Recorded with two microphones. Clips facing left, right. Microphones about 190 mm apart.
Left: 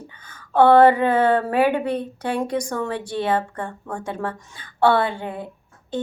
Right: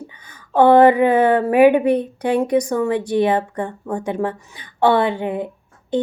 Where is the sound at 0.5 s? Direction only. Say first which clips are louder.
Right 2 dB; 15° right (ahead or behind).